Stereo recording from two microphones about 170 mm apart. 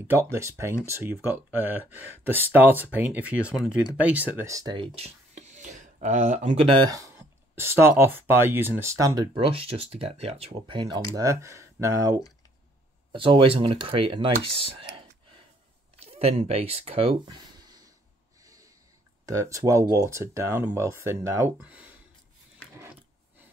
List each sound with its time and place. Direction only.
0.1 s speech: 15° right (ahead or behind)
13.1 s speech: 30° right (ahead or behind)
16.1 s speech: 35° right (ahead or behind)
18.4 s snort: 20° right (ahead or behind)
19.2 s speech: 20° right (ahead or behind)